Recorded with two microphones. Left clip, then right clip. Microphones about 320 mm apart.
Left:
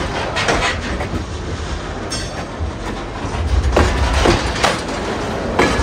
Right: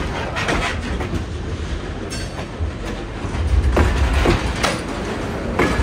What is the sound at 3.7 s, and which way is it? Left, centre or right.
Music, left.